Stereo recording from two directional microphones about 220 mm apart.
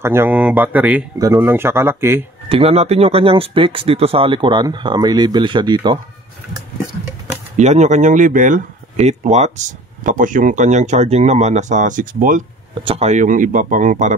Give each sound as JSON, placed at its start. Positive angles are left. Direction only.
{"t": 0.0, "sound": "speech", "side_deg": -10}
{"t": 2.5, "sound": "speech", "side_deg": -25}
{"t": 7.5, "sound": "speech", "side_deg": -30}
{"t": 12.7, "sound": "speech", "side_deg": -25}